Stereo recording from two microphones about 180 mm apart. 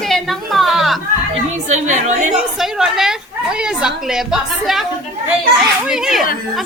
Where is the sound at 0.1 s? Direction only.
Centre (ahead or behind).